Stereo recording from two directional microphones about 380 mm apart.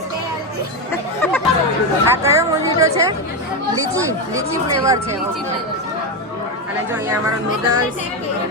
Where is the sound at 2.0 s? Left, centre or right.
Centre.